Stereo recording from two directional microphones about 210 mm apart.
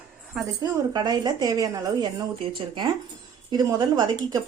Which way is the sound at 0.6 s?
20° right (ahead or behind).